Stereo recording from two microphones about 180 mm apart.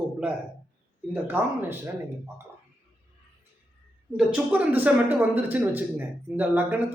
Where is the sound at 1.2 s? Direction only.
10° right (ahead or behind).